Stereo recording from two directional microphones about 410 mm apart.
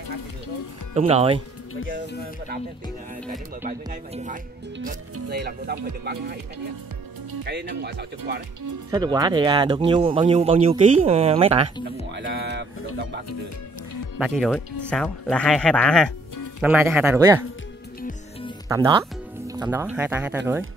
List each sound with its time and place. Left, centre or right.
0.9 s speech: centre
3.6 s speech: centre
7.4 s speech: right
8.9 s speech: centre
12.1 s speech: right
14.1 s speech: centre
18.7 s speech: centre